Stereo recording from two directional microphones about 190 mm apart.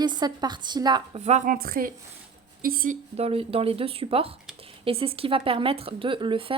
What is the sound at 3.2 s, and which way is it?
A woman's voice, 30° right (ahead or behind).